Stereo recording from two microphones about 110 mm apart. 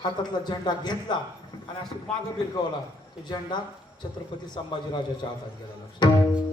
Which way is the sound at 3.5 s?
40° left (ahead or behind).